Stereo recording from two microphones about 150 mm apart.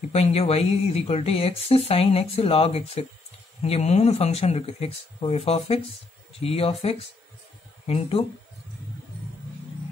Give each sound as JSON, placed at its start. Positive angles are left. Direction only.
{"t": 0.1, "sound": "speech", "side_deg": 45}